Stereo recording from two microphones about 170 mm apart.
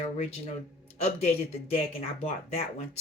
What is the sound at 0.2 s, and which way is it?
Speech, 40° left (ahead or behind).